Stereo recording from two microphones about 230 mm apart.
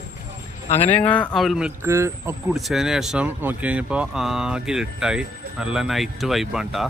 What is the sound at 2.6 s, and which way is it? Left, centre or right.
Speech, centre.